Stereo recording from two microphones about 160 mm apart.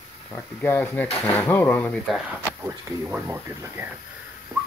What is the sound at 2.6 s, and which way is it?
Speech, 10° right (ahead or behind).